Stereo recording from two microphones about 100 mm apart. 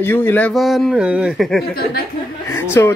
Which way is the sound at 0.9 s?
10° right (ahead or behind).